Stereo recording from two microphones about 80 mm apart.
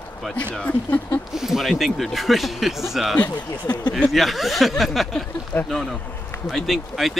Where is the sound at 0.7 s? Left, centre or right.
Left.